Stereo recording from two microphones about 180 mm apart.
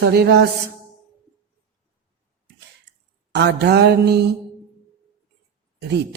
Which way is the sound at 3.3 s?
70° right (ahead or behind).